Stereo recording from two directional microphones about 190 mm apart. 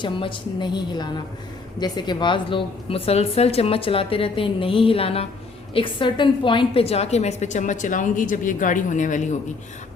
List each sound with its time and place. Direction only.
0.0 s a woman's voice: 25° left (ahead or behind)